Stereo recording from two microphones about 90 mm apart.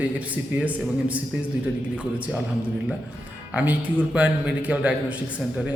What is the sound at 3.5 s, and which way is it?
A man's voice, 15° right (ahead or behind).